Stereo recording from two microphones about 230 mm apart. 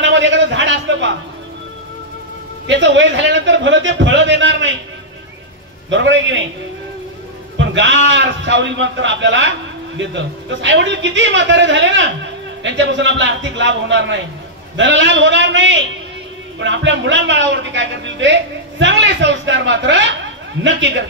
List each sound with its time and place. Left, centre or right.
0.0 s a sound: right
2.6 s speech: right
5.9 s speech: right
7.5 s speech: right